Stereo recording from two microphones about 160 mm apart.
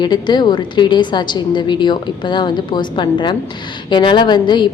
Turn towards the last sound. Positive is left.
turn(degrees=30)  # may be behind; listen again after turning